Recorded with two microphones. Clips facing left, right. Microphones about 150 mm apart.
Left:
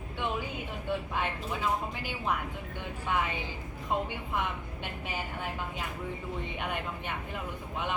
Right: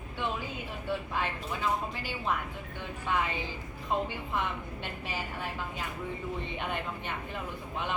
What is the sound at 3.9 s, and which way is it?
A woman's voice, 15° left (ahead or behind).